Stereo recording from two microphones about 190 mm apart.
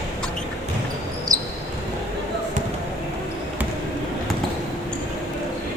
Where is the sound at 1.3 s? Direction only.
20° right (ahead or behind).